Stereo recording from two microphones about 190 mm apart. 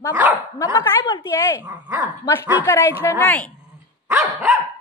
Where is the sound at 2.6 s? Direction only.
15° left (ahead or behind).